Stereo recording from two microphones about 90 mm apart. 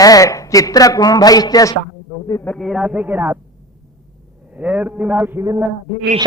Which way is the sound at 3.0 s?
20° right (ahead or behind).